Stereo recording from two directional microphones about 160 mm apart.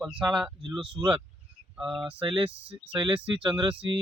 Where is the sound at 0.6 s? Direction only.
30° right (ahead or behind).